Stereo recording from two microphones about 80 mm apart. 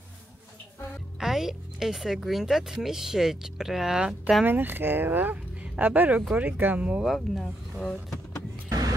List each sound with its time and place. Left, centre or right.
1.2 s speech: centre
4.5 s speech: right
7.1 s speech: centre
8.6 s vehicle: right